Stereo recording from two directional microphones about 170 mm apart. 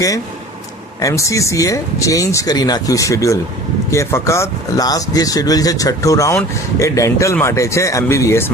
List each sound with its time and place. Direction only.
1.0 s speech: 20° left (ahead or behind)